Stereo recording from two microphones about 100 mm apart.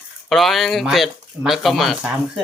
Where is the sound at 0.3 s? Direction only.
Centre (ahead or behind).